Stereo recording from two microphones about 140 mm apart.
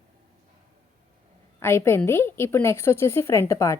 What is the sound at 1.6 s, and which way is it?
A woman's voice, 15° left (ahead or behind).